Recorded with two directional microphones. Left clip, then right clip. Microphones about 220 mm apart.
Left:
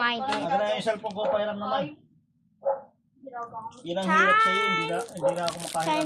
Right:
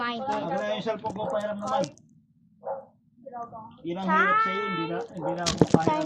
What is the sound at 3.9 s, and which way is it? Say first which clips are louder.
Speech: left 2 dB; 25° left (ahead or behind).